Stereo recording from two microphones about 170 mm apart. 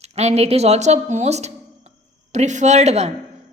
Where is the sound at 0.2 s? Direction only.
40° right (ahead or behind).